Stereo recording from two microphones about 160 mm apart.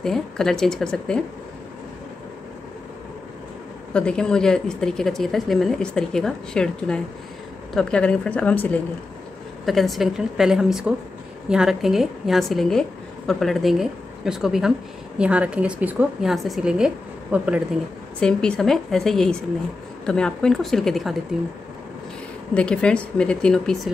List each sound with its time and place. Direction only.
0.0 s a woman's voice: 5° left (ahead or behind)
3.9 s a woman's voice: 5° left (ahead or behind)
9.7 s a woman's voice: centre (ahead or behind)
18.2 s a woman's voice: 5° left (ahead or behind)
22.5 s speech: 5° left (ahead or behind)